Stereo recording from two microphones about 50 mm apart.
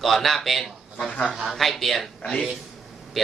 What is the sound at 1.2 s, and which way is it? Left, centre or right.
Speech, centre.